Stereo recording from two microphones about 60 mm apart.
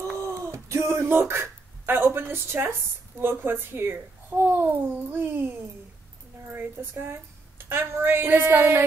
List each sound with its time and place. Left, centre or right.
0.2 s a sound: right
3.2 s a child's voice: right
6.5 s a child's voice: right